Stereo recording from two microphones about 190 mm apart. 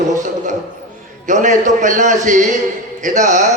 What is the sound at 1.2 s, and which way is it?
A man's voice, 40° right (ahead or behind).